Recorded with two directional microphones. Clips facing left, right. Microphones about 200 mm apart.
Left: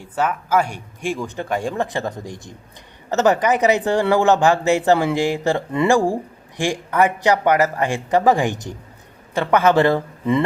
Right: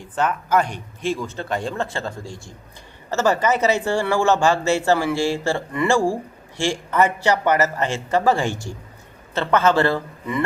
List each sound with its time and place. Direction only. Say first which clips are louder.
0.0 s speech: left 1 dB; 10° left (ahead or behind)